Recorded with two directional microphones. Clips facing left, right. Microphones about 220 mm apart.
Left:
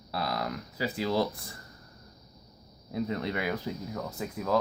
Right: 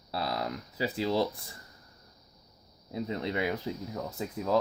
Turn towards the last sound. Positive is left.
turn(degrees=-25)  # may be behind; listen again after turning